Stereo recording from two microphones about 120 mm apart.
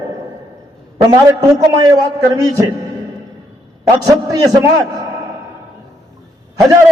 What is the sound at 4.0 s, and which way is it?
A man's voice, 30° right (ahead or behind).